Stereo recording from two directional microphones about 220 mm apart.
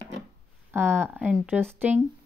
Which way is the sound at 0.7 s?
10° right (ahead or behind).